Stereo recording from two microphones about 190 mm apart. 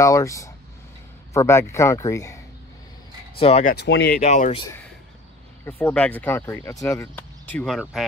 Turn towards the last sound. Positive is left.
turn(degrees=10)  # may be behind; listen again after turning